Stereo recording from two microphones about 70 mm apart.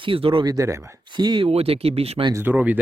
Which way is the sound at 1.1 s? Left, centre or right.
Right.